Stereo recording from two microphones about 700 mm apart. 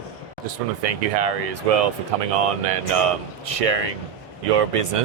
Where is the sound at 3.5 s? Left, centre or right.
Right.